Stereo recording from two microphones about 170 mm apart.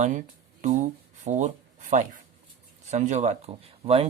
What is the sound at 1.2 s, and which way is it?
Speech, 45° right (ahead or behind).